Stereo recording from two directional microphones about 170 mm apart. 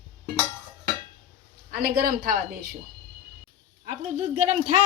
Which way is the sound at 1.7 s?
60° right (ahead or behind).